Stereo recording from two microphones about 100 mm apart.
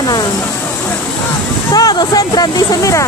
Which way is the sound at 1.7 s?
40° left (ahead or behind).